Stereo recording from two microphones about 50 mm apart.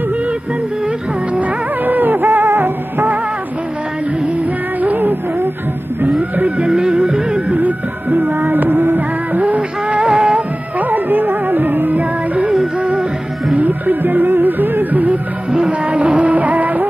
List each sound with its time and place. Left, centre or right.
1.3 s music: right
4.8 s music: right
6.7 s music: centre
7.5 s music: right
10.8 s music: right
13.6 s music: right
15.5 s music: right